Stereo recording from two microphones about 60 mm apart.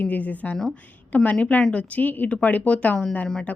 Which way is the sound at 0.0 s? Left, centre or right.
Left.